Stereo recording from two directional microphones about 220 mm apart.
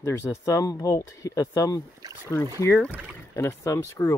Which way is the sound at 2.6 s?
10° left (ahead or behind).